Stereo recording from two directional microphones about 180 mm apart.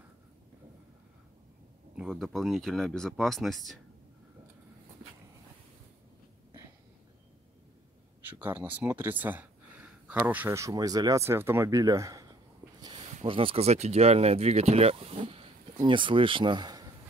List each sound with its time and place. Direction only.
2.0 s speech: 5° right (ahead or behind)
8.3 s speech: 10° right (ahead or behind)